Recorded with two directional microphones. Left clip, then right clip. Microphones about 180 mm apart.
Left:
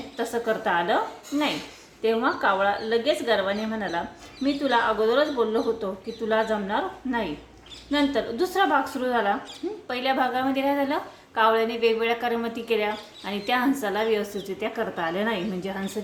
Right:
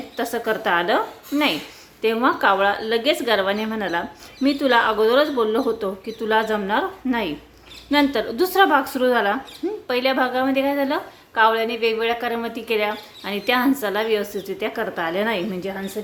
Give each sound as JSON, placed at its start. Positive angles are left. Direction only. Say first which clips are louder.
{"t": 0.2, "sound": "a woman's voice", "louder": "right 3 dB", "side_deg": -30}